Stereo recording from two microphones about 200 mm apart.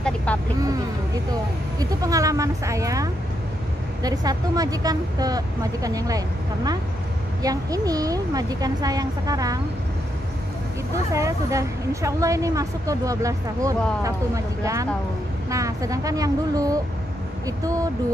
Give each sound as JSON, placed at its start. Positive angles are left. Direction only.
{"t": 0.0, "sound": "vehicle", "side_deg": 5}
{"t": 1.8, "sound": "a woman's voice", "side_deg": -15}
{"t": 11.1, "sound": "a woman's voice", "side_deg": -15}